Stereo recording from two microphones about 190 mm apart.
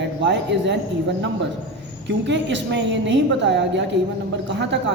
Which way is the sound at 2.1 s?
70° right (ahead or behind).